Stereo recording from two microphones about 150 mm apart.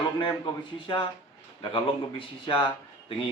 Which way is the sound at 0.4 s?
35° left (ahead or behind).